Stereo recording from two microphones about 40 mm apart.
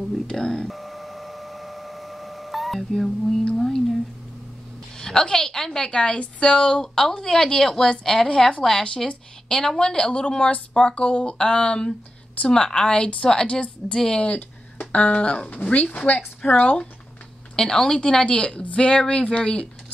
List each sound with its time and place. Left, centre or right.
0.5 s a sound: centre
3.5 s speech: centre
4.9 s a woman's voice: centre
5.9 s a woman's voice: left
8.3 s a woman's voice: left
14.9 s speech: left
15.5 s speech: left
17.6 s speech: centre